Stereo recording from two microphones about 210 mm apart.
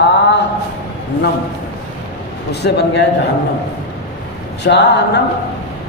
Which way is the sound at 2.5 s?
50° left (ahead or behind).